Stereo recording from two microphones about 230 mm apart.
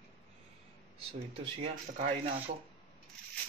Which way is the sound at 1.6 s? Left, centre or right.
Right.